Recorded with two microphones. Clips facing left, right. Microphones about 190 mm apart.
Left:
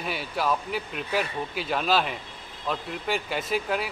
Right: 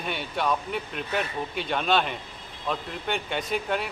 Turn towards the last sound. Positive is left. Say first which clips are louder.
# left 1 dB
turn(degrees=0)  # may be behind; listen again after turning